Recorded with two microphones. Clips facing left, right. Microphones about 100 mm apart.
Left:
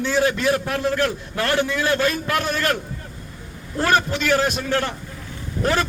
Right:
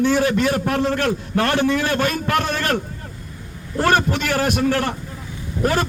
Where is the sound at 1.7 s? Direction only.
45° right (ahead or behind).